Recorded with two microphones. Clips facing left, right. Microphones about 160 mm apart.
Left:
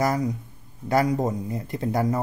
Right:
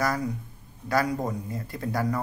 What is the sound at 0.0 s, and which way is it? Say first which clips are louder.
Speech: left 4 dB; 20° left (ahead or behind).